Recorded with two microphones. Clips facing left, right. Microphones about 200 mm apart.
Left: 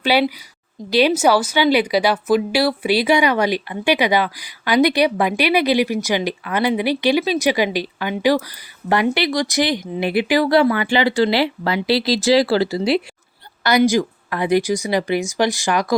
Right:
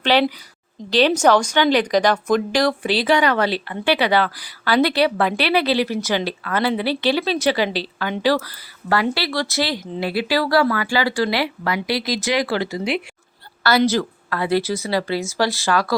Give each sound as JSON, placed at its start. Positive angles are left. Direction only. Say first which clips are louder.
{"t": 0.0, "sound": "speech", "louder": "even", "side_deg": 10}
{"t": 13.6, "sound": "speech", "louder": "left 2 dB", "side_deg": 15}